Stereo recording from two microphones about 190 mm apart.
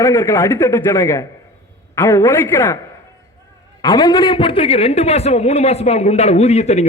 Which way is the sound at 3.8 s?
20° left (ahead or behind).